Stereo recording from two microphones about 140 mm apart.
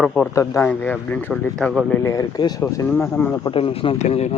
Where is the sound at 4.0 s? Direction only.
55° left (ahead or behind).